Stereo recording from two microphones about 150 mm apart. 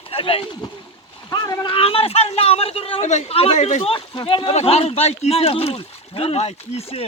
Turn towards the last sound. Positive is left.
turn(degrees=40)  # may be behind; listen again after turning